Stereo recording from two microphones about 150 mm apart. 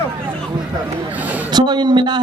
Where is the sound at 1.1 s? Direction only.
10° right (ahead or behind).